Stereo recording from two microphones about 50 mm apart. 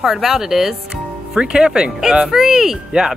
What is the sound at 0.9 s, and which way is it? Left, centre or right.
Speech, centre.